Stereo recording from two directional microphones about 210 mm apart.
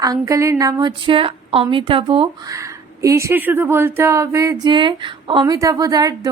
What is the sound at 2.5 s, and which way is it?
A woman's voice, 15° right (ahead or behind).